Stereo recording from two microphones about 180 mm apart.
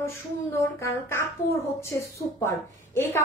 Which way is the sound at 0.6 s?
15° left (ahead or behind).